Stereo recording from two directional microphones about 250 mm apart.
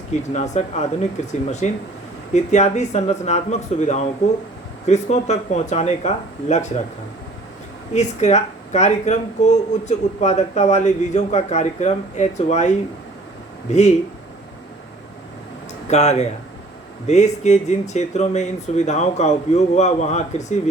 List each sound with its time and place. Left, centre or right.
0.1 s speech: left
7.9 s speech: left
15.9 s speech: left